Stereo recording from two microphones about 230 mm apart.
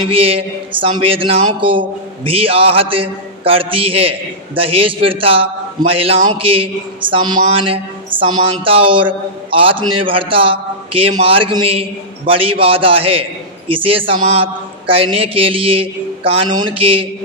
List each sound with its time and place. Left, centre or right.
0.1 s a man's voice: right